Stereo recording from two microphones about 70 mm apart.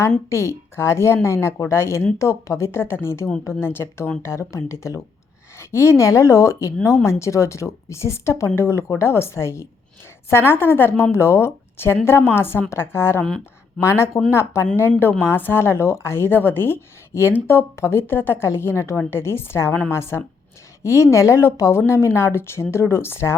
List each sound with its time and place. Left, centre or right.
0.3 s a woman's voice: left
13.2 s speech: centre
13.8 s a woman's voice: left
18.0 s a woman's voice: left